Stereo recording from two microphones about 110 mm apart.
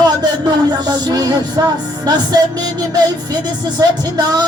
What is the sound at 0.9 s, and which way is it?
Music, 40° right (ahead or behind).